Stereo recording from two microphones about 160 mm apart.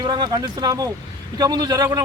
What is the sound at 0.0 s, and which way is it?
A man's voice, 25° right (ahead or behind).